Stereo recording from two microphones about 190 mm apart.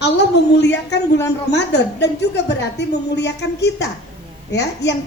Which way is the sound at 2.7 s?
65° left (ahead or behind).